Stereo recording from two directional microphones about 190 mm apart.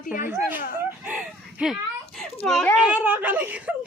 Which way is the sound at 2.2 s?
5° left (ahead or behind).